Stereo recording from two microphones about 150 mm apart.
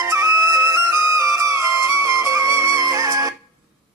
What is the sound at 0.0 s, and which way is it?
Music, 20° right (ahead or behind).